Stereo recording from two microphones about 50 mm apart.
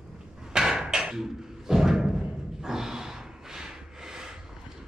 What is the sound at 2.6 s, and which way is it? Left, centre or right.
Snort, centre.